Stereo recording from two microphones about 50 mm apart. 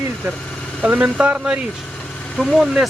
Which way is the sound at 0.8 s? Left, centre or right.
Right.